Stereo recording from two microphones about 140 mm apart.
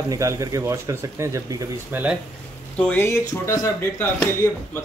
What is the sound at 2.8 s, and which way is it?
Speech, 10° left (ahead or behind).